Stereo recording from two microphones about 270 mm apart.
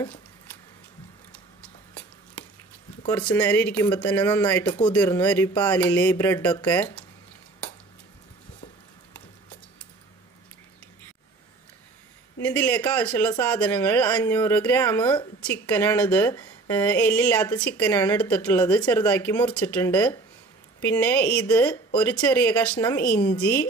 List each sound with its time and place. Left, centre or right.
3.1 s speech: centre
12.4 s a woman's voice: centre